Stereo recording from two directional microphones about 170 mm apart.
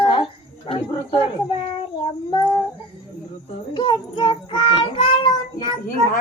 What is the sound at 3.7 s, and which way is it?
Child singing, 30° left (ahead or behind).